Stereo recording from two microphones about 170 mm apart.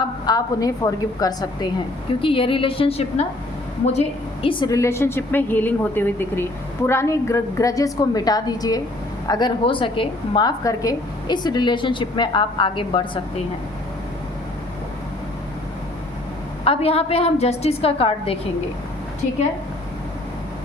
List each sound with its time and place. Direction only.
0.3 s a woman's voice: 25° left (ahead or behind)
4.4 s a woman's voice: 20° left (ahead or behind)
16.6 s a woman's voice: 35° left (ahead or behind)